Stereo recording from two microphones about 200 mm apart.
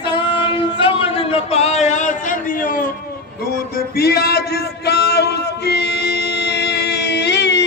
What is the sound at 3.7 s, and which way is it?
Music, 50° left (ahead or behind).